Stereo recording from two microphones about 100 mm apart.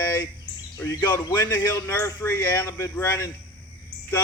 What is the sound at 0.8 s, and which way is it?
Speech, 35° left (ahead or behind).